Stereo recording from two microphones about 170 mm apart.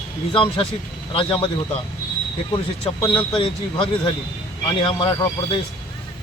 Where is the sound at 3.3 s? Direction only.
30° left (ahead or behind).